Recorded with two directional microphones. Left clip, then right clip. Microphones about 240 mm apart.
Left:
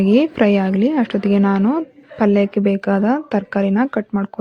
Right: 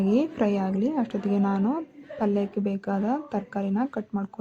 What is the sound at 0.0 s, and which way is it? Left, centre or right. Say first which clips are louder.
A woman's voice: left 10 dB; left.